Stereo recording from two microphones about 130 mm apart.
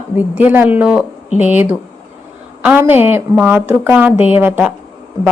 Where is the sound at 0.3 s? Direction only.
10° right (ahead or behind).